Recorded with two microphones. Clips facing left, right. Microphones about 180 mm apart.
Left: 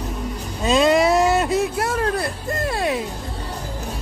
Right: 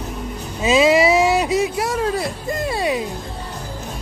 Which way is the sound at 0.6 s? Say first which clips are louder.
Right 2 dB; 5° right (ahead or behind).